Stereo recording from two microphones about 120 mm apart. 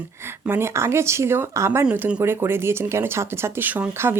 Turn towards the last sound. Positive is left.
turn(degrees=-20)  # may be behind; listen again after turning